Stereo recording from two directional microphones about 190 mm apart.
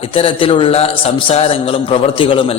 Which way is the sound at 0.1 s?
30° left (ahead or behind).